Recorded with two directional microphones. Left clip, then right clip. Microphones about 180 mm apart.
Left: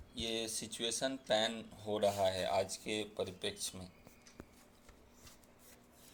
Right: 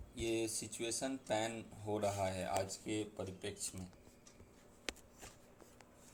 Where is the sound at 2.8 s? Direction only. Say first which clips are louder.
Left 2 dB; 10° left (ahead or behind).